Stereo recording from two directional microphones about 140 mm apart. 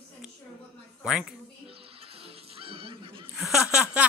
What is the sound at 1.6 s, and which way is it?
Music, 45° right (ahead or behind).